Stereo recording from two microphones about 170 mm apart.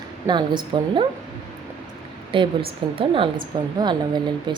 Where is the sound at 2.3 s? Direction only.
30° right (ahead or behind).